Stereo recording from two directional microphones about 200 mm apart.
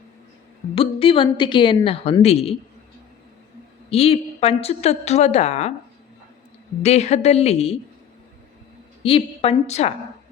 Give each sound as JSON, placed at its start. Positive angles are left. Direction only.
{"t": 0.8, "sound": "a woman's voice", "side_deg": 25}
{"t": 3.8, "sound": "a woman's voice", "side_deg": 30}
{"t": 6.8, "sound": "a woman's voice", "side_deg": 35}
{"t": 9.0, "sound": "a woman's voice", "side_deg": 30}